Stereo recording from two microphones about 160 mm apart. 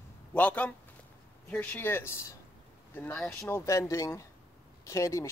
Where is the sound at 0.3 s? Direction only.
10° left (ahead or behind).